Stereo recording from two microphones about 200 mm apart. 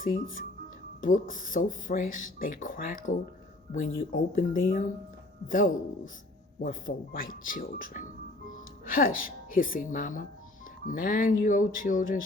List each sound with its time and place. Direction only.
0.0 s speech: 45° left (ahead or behind)